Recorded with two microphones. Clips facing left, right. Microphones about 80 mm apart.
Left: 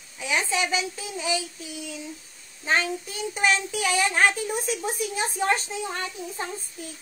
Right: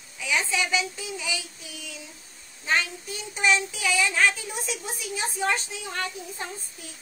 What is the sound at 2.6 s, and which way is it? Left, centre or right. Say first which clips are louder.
Speech: left 1 dB; left.